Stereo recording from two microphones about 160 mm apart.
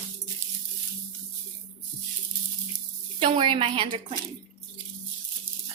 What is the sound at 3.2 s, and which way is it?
Speech, 35° right (ahead or behind).